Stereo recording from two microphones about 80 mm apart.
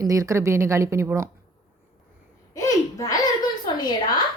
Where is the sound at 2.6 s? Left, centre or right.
Left.